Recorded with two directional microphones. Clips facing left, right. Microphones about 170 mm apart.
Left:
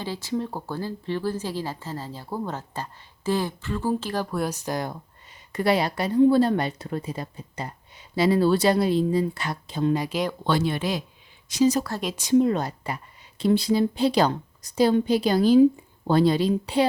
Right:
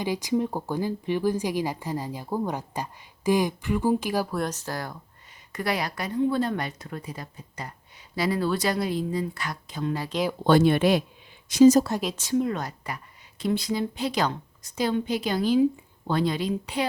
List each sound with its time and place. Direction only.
0.0 s speech: 15° right (ahead or behind)
4.4 s speech: 10° left (ahead or behind); by 10.0 s 30° left (ahead or behind)
10.4 s speech: 55° right (ahead or behind)
11.4 s speech: 50° right (ahead or behind)
12.1 s speech: 15° left (ahead or behind)
12.4 s a woman's voice: 30° left (ahead or behind)